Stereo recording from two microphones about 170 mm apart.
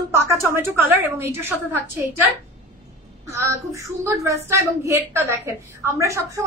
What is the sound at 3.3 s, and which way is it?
A woman's voice, 15° right (ahead or behind).